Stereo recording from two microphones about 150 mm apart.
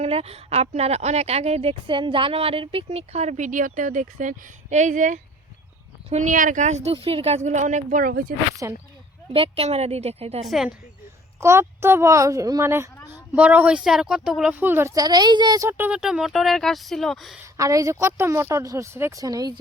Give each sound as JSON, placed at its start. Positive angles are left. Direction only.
{"t": 0.0, "sound": "speech", "side_deg": -45}
{"t": 6.9, "sound": "speech", "side_deg": -40}
{"t": 8.6, "sound": "a woman's voice", "side_deg": -20}
{"t": 9.3, "sound": "speech", "side_deg": -40}
{"t": 10.4, "sound": "speech", "side_deg": 0}
{"t": 11.3, "sound": "a woman's voice", "side_deg": -20}
{"t": 15.9, "sound": "speech", "side_deg": -5}
{"t": 17.4, "sound": "a woman's voice", "side_deg": -20}